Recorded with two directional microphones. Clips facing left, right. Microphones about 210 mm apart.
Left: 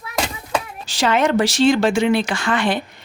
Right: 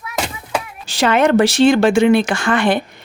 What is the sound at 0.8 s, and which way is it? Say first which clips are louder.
Speech: right 4 dB; 60° right (ahead or behind).